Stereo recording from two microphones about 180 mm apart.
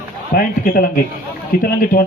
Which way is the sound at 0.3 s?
55° left (ahead or behind).